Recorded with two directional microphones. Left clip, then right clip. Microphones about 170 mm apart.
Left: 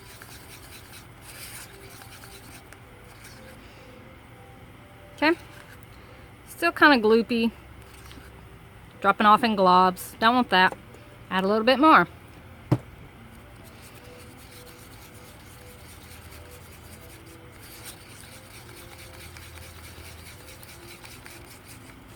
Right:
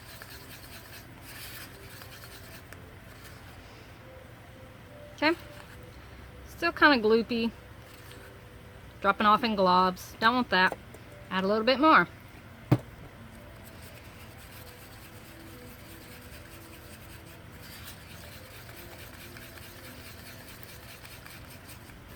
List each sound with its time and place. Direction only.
5.2 s speech: 65° left (ahead or behind)
6.6 s speech: 65° left (ahead or behind)
9.0 s speech: 60° left (ahead or behind)